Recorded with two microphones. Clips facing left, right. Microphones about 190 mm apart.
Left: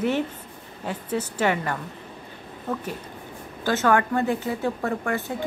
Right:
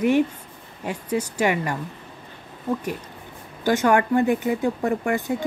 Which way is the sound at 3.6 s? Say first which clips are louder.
Right 2 dB; 15° right (ahead or behind).